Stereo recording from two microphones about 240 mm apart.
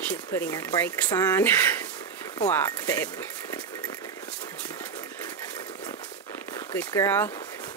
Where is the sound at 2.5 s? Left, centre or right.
Centre.